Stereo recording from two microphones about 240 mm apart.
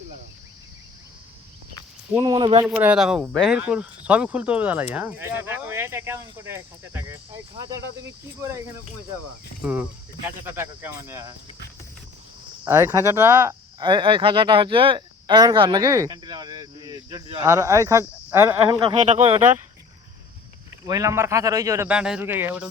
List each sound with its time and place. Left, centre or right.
2.1 s speech: centre
2.6 s speech: centre
10.2 s speech: centre
12.6 s speech: centre; by 19.4 s right
20.8 s speech: centre